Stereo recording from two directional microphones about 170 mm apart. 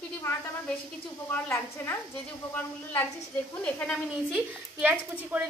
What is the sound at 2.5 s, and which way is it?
A woman's voice, 10° left (ahead or behind).